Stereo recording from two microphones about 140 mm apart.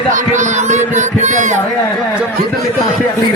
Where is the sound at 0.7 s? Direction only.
60° right (ahead or behind).